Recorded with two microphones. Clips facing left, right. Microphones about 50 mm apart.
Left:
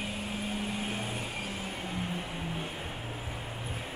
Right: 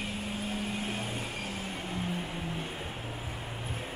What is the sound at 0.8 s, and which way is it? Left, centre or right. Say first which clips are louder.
Vehicle: even; left.